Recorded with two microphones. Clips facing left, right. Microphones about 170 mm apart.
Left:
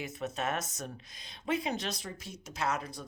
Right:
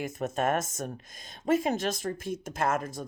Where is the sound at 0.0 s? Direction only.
50° right (ahead or behind).